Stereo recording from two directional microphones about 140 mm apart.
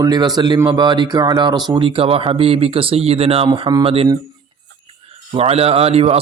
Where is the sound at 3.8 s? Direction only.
40° right (ahead or behind).